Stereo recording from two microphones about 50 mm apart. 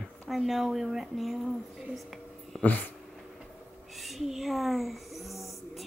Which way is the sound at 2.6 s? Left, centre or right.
Left.